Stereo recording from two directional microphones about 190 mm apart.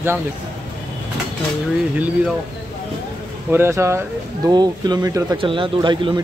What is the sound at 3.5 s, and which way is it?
Speech, 15° right (ahead or behind).